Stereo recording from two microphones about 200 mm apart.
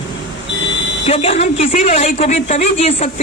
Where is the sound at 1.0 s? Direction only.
30° left (ahead or behind).